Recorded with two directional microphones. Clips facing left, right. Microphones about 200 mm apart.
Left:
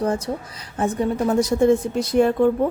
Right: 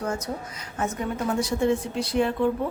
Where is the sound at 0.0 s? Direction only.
35° left (ahead or behind).